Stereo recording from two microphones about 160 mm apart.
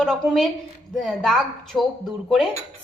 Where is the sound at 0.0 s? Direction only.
Centre (ahead or behind).